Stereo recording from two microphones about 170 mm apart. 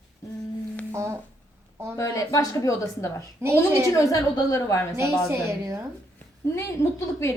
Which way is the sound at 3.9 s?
20° left (ahead or behind).